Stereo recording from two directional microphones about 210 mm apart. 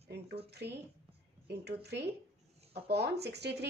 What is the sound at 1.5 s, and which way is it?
A woman's voice, 50° right (ahead or behind).